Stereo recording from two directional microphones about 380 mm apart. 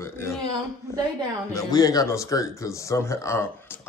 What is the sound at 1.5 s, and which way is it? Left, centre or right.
Speech, centre.